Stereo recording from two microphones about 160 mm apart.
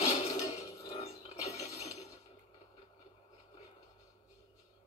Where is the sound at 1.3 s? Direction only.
40° left (ahead or behind).